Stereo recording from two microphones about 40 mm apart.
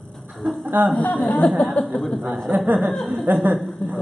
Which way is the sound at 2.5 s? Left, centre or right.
Right.